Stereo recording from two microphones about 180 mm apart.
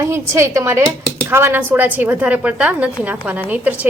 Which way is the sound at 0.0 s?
15° right (ahead or behind).